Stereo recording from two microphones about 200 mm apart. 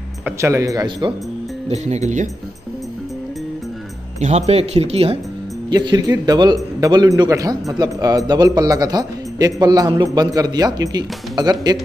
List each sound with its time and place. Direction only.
0.2 s speech: 15° right (ahead or behind)
1.7 s speech: 35° right (ahead or behind)
4.2 s a man's voice: 35° right (ahead or behind)